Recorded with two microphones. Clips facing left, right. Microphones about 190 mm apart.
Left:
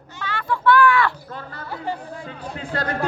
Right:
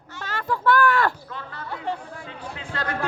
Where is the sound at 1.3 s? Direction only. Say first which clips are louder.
Left 2 dB; 40° left (ahead or behind).